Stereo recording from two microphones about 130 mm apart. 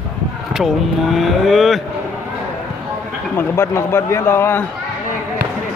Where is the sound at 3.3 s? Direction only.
20° left (ahead or behind).